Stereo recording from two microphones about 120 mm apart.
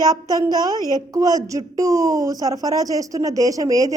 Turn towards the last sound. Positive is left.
turn(degrees=-30)  # may be behind; listen again after turning